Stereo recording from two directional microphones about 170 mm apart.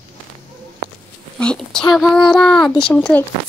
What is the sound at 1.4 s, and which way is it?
Speech, 5° left (ahead or behind).